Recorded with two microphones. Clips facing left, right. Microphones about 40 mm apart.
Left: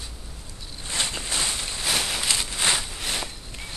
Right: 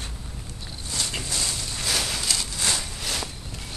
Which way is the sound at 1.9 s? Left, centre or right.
Centre.